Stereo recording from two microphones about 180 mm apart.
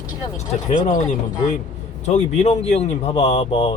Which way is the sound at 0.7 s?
40° left (ahead or behind).